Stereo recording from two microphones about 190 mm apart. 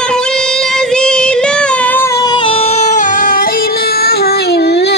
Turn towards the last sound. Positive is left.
turn(degrees=60)  # may be behind; listen again after turning